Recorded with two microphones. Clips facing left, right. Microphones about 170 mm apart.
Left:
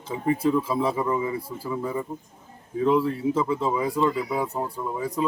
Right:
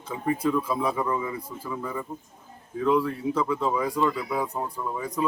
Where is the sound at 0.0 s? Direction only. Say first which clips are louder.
Left 3 dB; 25° left (ahead or behind).